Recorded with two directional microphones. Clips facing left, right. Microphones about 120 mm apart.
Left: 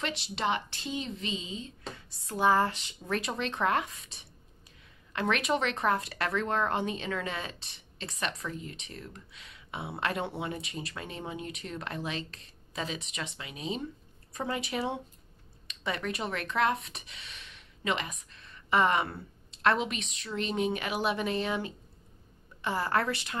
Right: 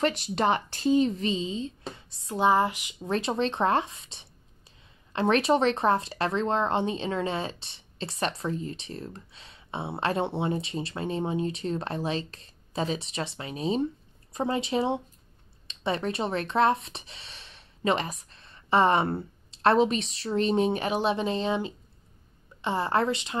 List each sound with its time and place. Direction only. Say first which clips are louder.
0.0 s speech: right 7 dB; 45° right (ahead or behind); by 2.0 s 30° right (ahead or behind)
2.2 s speech: right 3 dB; 20° right (ahead or behind)
3.1 s speech: right 6 dB; 25° right (ahead or behind)
14.3 s speech: right 6 dB; 25° right (ahead or behind)